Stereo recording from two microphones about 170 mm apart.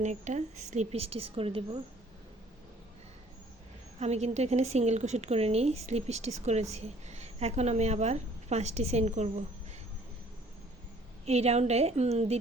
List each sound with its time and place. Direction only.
0.0 s a woman's voice: 45° right (ahead or behind)
4.0 s a woman's voice: 40° right (ahead or behind)
11.3 s a woman's voice: 40° right (ahead or behind)